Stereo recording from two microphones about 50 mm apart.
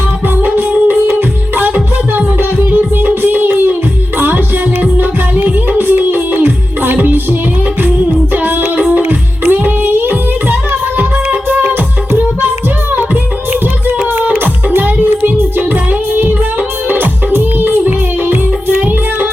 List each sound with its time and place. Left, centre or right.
0.4 s music: right
4.8 s music: right
9.5 s music: right
14.3 s music: right